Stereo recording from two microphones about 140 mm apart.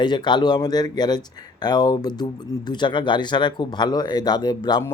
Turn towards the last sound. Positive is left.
turn(degrees=35)  # may be behind; listen again after turning